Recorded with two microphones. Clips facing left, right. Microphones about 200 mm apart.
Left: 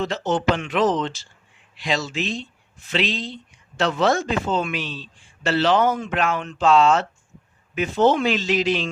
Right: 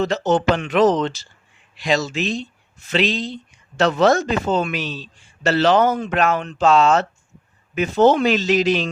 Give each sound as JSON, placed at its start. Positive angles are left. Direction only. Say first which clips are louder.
{"t": 0.0, "sound": "speech", "louder": "right 4 dB", "side_deg": -45}